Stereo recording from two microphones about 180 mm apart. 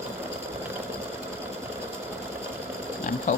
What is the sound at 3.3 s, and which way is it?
Sewing machine, 45° left (ahead or behind).